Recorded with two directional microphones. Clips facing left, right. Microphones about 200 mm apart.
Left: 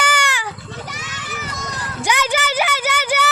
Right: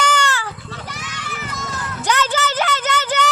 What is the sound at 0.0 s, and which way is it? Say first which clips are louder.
Goat: right 2 dB; 10° left (ahead or behind).